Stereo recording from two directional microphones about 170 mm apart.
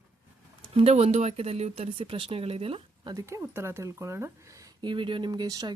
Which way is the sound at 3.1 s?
15° right (ahead or behind).